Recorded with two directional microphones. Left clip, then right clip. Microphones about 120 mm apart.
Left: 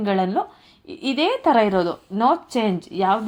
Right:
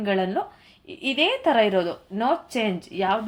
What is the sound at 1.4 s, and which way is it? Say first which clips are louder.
Speech: left 5 dB; 35° left (ahead or behind).